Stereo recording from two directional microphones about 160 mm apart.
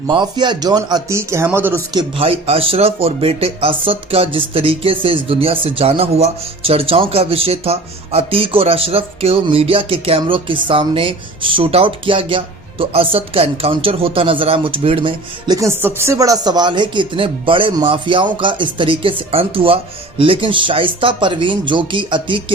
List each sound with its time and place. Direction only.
0.1 s a man's voice: 30° right (ahead or behind); by 1.8 s 15° right (ahead or behind)
1.9 s speech: 30° right (ahead or behind)
15.5 s speech: 15° right (ahead or behind)